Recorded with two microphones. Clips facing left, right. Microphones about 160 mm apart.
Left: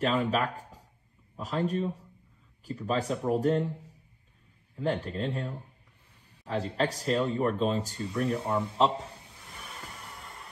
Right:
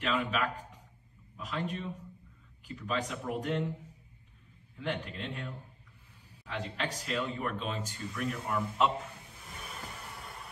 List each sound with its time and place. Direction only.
0.0 s speech: 35° left (ahead or behind)
4.7 s speech: 40° left (ahead or behind)